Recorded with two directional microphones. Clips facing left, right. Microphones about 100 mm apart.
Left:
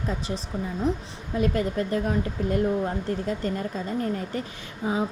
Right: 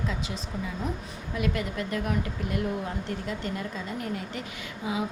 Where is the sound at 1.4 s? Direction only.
35° left (ahead or behind).